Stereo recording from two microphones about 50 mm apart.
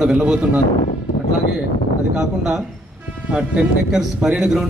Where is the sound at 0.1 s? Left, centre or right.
Right.